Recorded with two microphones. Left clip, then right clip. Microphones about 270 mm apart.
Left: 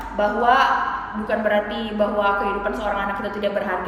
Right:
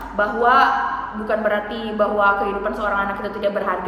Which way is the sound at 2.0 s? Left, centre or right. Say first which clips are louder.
Right 3 dB; centre.